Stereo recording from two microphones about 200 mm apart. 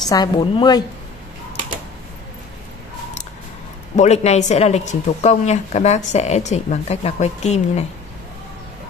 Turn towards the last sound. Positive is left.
turn(degrees=35)  # may be behind; listen again after turning